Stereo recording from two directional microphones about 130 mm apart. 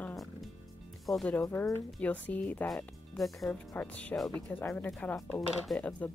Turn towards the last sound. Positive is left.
turn(degrees=10)  # may be behind; listen again after turning